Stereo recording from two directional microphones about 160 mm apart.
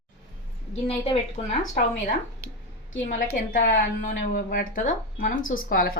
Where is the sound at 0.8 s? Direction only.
40° left (ahead or behind).